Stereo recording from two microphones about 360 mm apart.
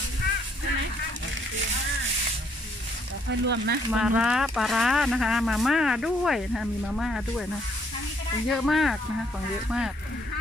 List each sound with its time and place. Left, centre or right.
3.3 s speech: right
3.9 s speech: centre
8.5 s speech: centre